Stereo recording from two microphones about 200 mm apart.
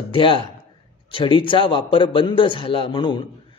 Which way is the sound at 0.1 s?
25° left (ahead or behind).